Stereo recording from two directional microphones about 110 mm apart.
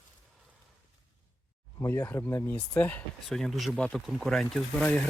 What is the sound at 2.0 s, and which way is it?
Speech, 20° left (ahead or behind).